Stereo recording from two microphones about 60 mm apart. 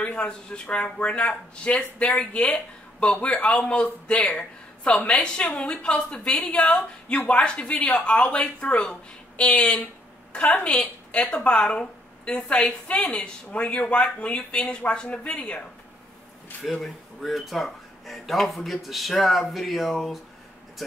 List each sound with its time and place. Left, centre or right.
0.0 s a woman's voice: centre
17.2 s speech: centre